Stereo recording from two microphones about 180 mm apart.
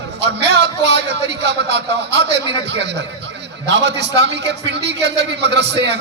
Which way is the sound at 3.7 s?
75° right (ahead or behind).